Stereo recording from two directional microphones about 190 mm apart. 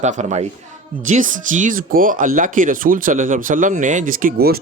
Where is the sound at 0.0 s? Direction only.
40° right (ahead or behind).